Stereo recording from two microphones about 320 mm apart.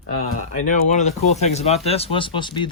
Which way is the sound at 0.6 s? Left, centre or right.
Left.